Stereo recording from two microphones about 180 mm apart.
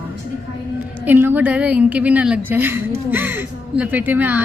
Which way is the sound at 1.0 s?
10° right (ahead or behind).